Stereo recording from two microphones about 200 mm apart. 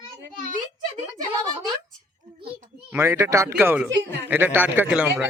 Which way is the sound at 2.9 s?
15° right (ahead or behind).